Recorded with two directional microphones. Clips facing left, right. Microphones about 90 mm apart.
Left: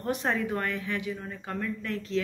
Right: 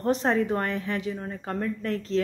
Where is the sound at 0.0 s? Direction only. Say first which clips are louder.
Right 5 dB; 35° right (ahead or behind).